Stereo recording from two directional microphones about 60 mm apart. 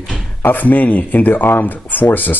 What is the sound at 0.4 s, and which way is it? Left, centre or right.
Speech, left.